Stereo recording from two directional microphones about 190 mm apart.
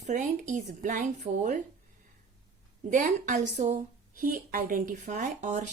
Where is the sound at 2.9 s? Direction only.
40° right (ahead or behind).